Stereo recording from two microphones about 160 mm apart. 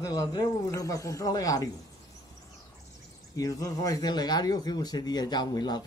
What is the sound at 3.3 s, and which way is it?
Speech, 20° left (ahead or behind).